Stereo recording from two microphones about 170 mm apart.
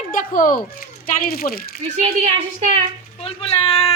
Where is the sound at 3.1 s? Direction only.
35° left (ahead or behind).